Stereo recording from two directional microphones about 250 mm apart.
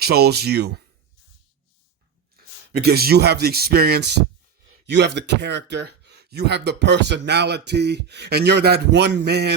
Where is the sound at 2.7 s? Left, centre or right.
Right.